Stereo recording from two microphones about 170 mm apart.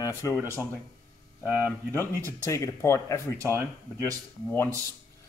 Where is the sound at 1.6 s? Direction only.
15° left (ahead or behind).